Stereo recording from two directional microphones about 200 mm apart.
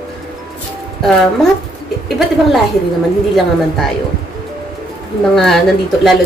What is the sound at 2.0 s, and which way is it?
Speech, centre (ahead or behind).